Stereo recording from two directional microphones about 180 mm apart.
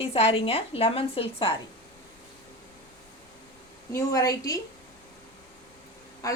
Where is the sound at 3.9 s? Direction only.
20° left (ahead or behind).